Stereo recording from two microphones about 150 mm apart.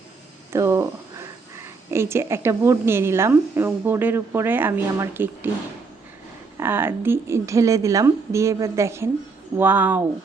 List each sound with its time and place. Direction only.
0.5 s a sound: 20° right (ahead or behind)
1.9 s a woman's voice: 15° right (ahead or behind)
6.6 s a woman's voice: 15° right (ahead or behind)